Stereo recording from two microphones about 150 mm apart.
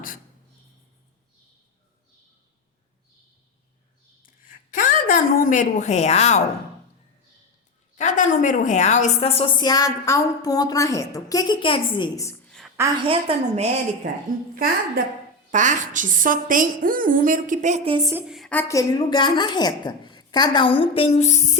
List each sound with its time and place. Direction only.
4.2 s a woman's voice: 65° left (ahead or behind); by 6.4 s 45° left (ahead or behind)
7.9 s a woman's voice: 55° left (ahead or behind)
9.6 s a woman's voice: 25° left (ahead or behind)
12.5 s a sound: centre (ahead or behind)
13.0 s a woman's voice: 40° right (ahead or behind)
14.5 s a woman's voice: 75° right (ahead or behind)
15.4 s a woman's voice: 55° right (ahead or behind)
18.3 s a woman's voice: centre (ahead or behind)
18.5 s a woman's voice: 20° left (ahead or behind); by 21.6 s 45° left (ahead or behind)